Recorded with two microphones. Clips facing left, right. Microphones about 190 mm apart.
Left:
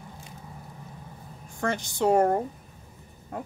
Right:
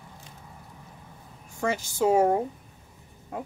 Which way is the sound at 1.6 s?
5° right (ahead or behind).